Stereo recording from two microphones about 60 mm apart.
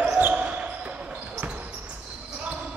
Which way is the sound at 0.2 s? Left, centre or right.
Right.